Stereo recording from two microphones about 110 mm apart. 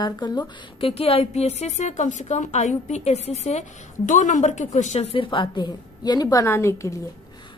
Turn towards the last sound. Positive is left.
turn(degrees=25)  # may be behind; listen again after turning